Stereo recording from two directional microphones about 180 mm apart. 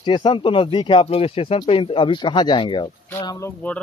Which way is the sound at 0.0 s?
25° left (ahead or behind).